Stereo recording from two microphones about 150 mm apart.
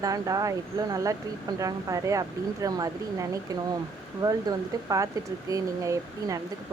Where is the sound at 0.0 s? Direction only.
25° right (ahead or behind).